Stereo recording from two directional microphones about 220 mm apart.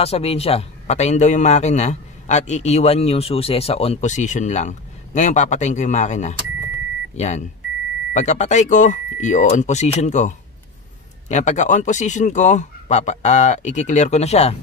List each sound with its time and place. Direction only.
0.0 s a man's voice: 25° left (ahead or behind)